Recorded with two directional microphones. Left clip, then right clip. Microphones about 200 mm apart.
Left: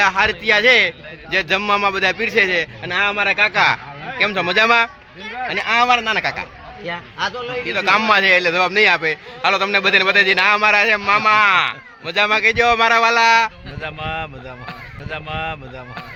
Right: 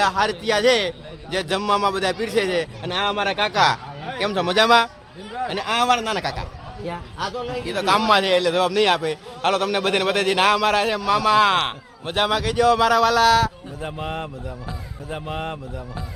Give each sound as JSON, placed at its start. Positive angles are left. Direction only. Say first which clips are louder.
{"t": 0.0, "sound": "a man's voice", "louder": "left 4 dB", "side_deg": 10}
{"t": 6.8, "sound": "a man's voice", "louder": "left 5 dB", "side_deg": -10}
{"t": 7.7, "sound": "a man's voice", "louder": "left 3 dB", "side_deg": 10}
{"t": 13.8, "sound": "speech", "louder": "left 4 dB", "side_deg": -20}